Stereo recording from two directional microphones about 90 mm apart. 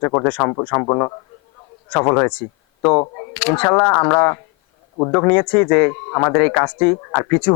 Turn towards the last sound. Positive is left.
turn(degrees=20)  # may be behind; listen again after turning